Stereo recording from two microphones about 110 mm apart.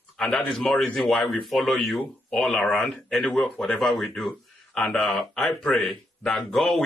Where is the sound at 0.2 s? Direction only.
10° left (ahead or behind).